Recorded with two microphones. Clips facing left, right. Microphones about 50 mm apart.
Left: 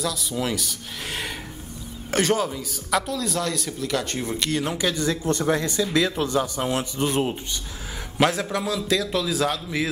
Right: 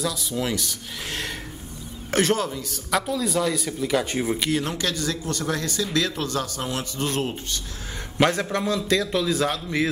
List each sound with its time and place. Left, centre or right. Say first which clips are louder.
0.0 s a man's voice: even; centre
3.0 s speech: right 2 dB; centre
4.6 s speech: left 2 dB; centre
4.9 s a man's voice: left 4 dB; left
8.2 s a man's voice: even; centre